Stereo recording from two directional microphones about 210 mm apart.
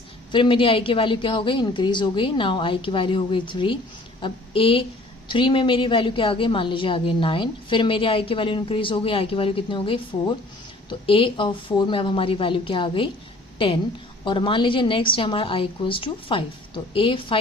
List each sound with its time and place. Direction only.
0.3 s a woman's voice: 25° left (ahead or behind)
14.3 s a woman's voice: 25° left (ahead or behind)